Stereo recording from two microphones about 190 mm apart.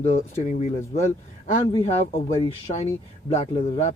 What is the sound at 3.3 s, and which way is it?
Speech, 35° left (ahead or behind).